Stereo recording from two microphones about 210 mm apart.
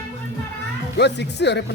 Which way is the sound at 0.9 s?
55° left (ahead or behind).